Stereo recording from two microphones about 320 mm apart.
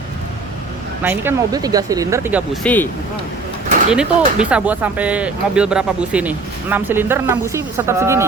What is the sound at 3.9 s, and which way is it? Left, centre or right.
Speech, centre.